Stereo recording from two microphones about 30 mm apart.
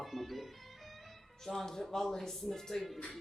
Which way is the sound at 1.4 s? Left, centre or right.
Centre.